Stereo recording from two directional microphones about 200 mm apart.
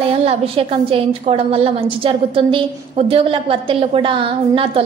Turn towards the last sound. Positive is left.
turn(degrees=-25)  # may be behind; listen again after turning